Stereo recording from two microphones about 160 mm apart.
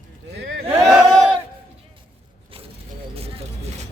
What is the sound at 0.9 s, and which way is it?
Battle cry, 5° right (ahead or behind).